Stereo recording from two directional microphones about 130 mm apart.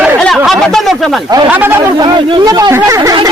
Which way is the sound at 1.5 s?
15° right (ahead or behind).